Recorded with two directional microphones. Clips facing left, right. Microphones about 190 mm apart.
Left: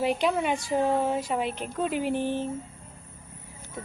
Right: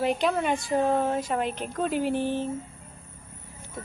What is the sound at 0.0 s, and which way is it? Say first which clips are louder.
Speech: even; 5° left (ahead or behind).